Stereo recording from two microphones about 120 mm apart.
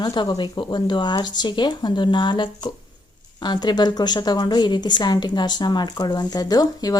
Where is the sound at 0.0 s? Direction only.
35° left (ahead or behind).